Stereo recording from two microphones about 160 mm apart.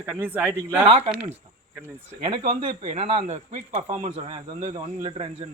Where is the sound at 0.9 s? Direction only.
40° right (ahead or behind).